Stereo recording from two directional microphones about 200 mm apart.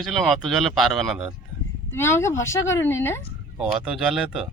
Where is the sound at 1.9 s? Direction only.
15° left (ahead or behind).